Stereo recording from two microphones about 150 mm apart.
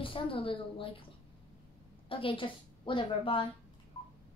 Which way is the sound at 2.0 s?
35° left (ahead or behind).